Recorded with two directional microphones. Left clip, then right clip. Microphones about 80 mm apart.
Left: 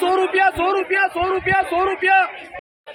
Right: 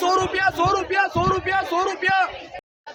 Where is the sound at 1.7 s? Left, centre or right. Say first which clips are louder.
Left 3 dB; right.